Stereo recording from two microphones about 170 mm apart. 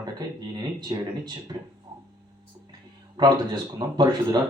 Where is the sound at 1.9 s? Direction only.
30° right (ahead or behind).